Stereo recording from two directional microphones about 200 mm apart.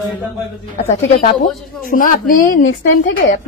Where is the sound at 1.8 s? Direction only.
45° left (ahead or behind).